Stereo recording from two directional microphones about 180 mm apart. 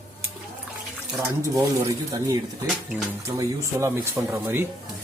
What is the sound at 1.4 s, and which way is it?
Speech, 15° right (ahead or behind).